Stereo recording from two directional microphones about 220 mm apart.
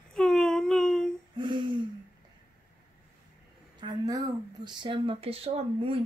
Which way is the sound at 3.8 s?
15° right (ahead or behind).